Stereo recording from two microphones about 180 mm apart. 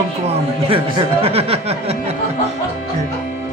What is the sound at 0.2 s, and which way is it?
Speech, 35° right (ahead or behind).